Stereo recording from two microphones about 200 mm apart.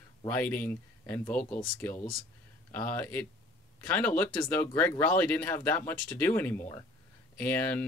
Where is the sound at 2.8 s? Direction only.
10° left (ahead or behind).